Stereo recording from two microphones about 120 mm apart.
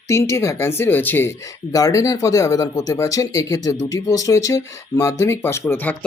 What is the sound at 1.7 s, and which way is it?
Speech, 30° left (ahead or behind).